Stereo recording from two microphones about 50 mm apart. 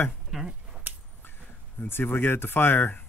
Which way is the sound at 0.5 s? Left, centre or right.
Centre.